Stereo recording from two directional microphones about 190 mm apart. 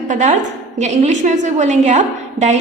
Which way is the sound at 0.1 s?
40° right (ahead or behind).